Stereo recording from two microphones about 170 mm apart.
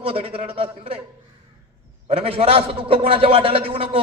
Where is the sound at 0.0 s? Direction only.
35° right (ahead or behind).